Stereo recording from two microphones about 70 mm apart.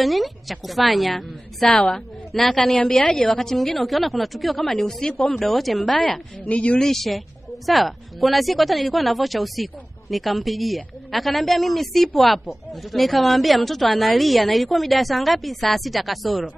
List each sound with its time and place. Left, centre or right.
0.0 s a woman's voice: centre
5.9 s a woman's voice: centre
6.8 s a woman's voice: centre